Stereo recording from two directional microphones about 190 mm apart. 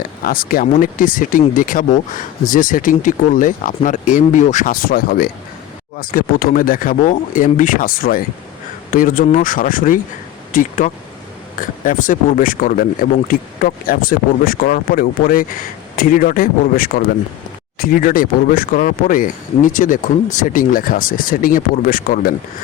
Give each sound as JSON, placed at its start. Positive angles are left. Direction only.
{"t": 0.3, "sound": "speech", "side_deg": 50}